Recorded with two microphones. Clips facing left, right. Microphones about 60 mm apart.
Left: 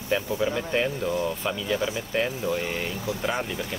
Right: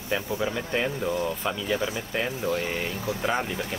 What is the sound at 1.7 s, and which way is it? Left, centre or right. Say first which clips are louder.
Speech: left 2 dB; centre.